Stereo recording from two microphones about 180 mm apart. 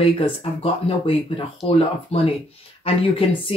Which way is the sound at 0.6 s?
30° left (ahead or behind).